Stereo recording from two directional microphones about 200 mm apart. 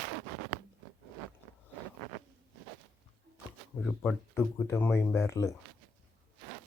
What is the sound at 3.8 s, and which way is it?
Speech, 5° left (ahead or behind).